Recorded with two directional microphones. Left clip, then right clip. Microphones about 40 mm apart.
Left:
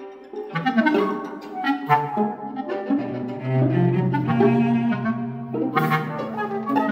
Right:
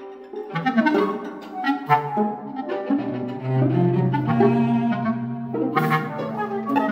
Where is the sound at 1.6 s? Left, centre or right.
Right.